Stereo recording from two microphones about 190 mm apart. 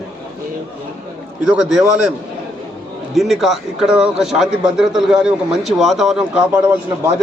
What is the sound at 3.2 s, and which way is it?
A man's voice, centre (ahead or behind).